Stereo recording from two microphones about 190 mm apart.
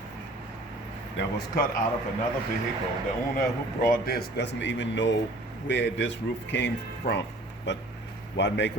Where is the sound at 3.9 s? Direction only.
50° left (ahead or behind).